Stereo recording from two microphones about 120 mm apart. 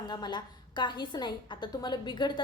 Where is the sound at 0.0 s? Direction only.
35° left (ahead or behind).